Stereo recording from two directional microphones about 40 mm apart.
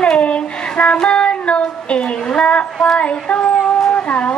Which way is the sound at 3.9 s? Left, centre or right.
Left.